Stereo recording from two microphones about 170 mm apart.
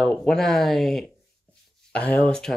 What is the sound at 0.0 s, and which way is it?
Speech, 5° left (ahead or behind).